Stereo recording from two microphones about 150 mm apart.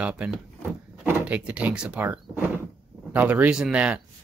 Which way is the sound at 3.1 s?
10° right (ahead or behind).